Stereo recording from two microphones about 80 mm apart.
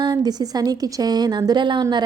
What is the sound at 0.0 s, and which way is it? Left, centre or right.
A woman's voice, right.